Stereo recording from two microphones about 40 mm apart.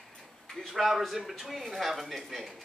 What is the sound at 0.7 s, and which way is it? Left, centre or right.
Speech, centre.